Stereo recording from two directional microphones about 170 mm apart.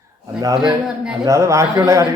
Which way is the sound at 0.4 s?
25° right (ahead or behind).